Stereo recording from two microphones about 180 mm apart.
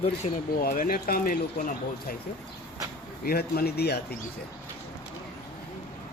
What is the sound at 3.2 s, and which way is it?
Speech, 60° left (ahead or behind).